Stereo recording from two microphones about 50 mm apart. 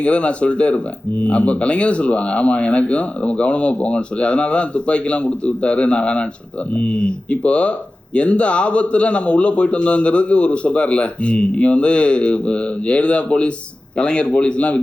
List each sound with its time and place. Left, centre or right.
0.0 s speech: left